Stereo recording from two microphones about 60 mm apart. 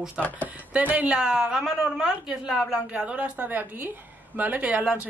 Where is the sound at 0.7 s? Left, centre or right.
Right.